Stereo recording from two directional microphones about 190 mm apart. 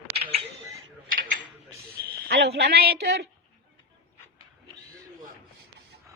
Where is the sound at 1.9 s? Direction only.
60° right (ahead or behind).